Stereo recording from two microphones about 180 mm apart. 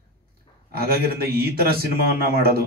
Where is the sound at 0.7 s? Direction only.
55° right (ahead or behind).